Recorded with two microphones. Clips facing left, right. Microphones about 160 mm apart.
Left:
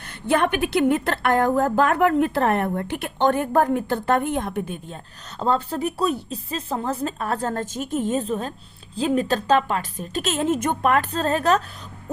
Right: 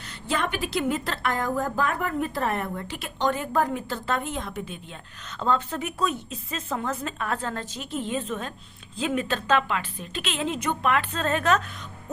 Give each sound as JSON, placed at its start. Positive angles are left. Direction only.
{"t": 0.3, "sound": "a woman's voice", "side_deg": 60}
{"t": 5.4, "sound": "speech", "side_deg": 35}